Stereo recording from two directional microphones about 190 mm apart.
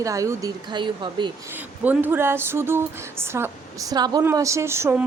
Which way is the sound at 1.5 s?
10° right (ahead or behind).